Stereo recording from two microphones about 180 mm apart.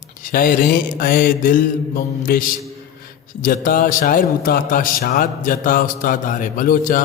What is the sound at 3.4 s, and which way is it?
Speech, 50° left (ahead or behind).